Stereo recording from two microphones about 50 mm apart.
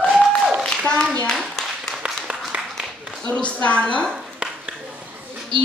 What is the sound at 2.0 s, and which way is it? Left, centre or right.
Applause, centre.